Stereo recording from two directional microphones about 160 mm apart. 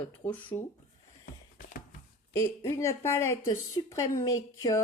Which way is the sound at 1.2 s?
60° left (ahead or behind).